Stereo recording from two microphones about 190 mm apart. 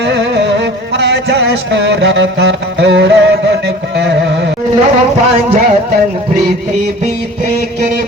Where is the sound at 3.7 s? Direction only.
65° right (ahead or behind).